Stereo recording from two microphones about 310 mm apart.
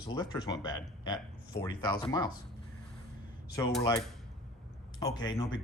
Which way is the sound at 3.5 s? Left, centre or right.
Centre.